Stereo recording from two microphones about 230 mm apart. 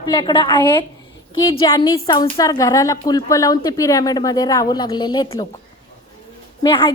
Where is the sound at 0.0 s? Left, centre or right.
Centre.